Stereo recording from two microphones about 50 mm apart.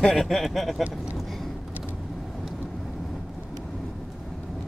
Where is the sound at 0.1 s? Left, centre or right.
Centre.